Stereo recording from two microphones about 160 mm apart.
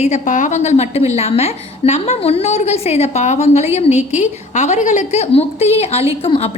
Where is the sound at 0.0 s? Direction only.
50° left (ahead or behind).